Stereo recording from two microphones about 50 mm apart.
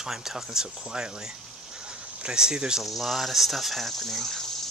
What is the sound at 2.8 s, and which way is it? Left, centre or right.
Speech, centre.